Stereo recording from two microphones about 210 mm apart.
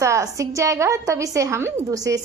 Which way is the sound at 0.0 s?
15° right (ahead or behind).